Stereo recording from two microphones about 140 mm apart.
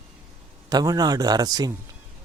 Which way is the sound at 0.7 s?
30° right (ahead or behind).